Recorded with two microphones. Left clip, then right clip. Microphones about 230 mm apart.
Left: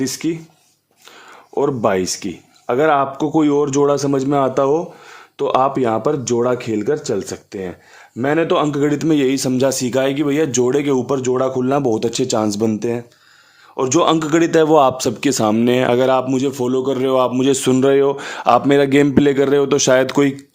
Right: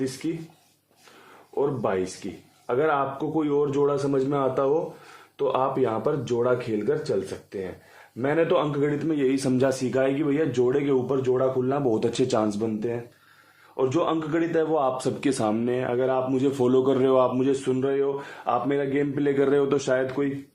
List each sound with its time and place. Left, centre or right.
0.0 s speech: left
1.5 s speech: left
9.3 s speech: left
11.9 s speech: left
14.9 s speech: left
15.7 s speech: left
16.6 s speech: centre; by 20.3 s left